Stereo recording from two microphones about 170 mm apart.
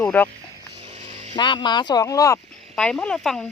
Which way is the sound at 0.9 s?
40° right (ahead or behind).